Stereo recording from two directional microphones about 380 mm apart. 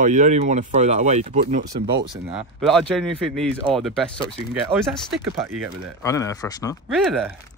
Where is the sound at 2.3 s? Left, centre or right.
Centre.